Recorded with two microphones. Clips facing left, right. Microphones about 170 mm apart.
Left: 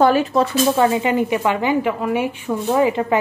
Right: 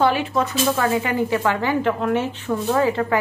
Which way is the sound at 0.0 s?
40° left (ahead or behind).